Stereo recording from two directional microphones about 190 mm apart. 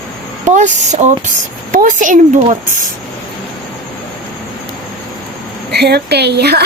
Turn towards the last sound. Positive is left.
turn(degrees=-60)  # may be behind; listen again after turning